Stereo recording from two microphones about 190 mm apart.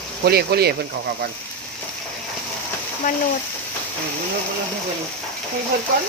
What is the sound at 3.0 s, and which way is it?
Speech, 45° left (ahead or behind).